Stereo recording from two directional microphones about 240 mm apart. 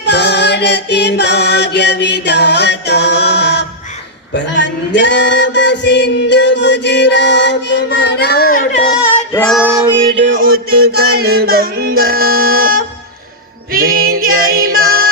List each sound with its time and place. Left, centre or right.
0.0 s music: left
4.4 s a sound: left
9.3 s female singing: centre
10.2 s music: right
10.4 s music: right
12.5 s a sound: right
13.7 s female singing: right
14.8 s music: right